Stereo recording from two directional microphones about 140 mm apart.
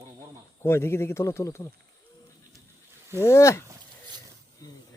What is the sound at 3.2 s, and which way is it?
Speech, 20° left (ahead or behind).